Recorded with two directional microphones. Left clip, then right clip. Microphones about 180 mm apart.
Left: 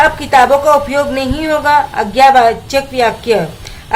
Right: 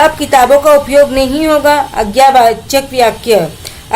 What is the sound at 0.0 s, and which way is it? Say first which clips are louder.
Speech: right 1 dB; 25° right (ahead or behind).